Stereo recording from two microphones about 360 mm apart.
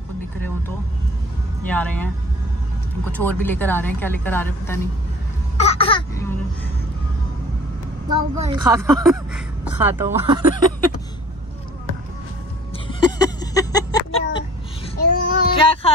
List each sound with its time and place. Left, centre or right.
1.7 s a woman's voice: centre
3.1 s a woman's voice: centre
8.1 s speech: centre
8.6 s a woman's voice: centre
12.7 s a sound: centre
15.0 s child singing: centre